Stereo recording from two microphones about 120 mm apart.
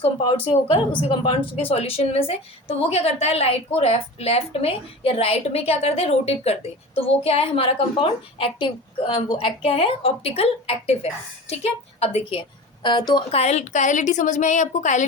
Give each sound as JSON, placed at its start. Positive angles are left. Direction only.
{"t": 0.0, "sound": "a woman's voice", "side_deg": 45}
{"t": 13.3, "sound": "a woman's voice", "side_deg": 65}